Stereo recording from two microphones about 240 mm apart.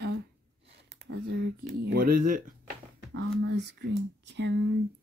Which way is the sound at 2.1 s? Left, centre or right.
Right.